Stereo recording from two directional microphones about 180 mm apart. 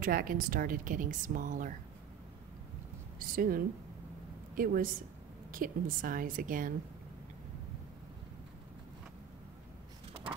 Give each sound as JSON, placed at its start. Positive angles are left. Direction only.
{"t": 0.0, "sound": "a woman's voice", "side_deg": -50}
{"t": 3.2, "sound": "a woman's voice", "side_deg": -50}